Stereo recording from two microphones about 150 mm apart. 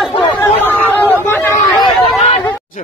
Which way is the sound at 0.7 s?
10° left (ahead or behind).